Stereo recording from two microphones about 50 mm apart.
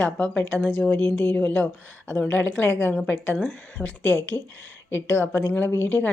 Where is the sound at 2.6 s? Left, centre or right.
Left.